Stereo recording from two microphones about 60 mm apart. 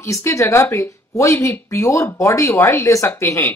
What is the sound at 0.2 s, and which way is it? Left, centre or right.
A woman's voice, left.